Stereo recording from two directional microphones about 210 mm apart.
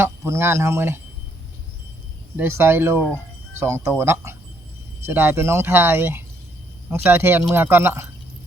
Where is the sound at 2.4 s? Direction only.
10° right (ahead or behind).